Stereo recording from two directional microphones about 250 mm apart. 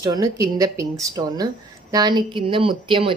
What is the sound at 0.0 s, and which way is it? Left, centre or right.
Speech, centre.